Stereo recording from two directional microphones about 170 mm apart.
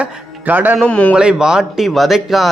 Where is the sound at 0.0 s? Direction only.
10° right (ahead or behind).